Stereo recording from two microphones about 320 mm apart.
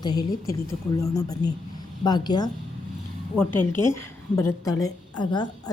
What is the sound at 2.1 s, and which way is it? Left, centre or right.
A woman's voice, centre.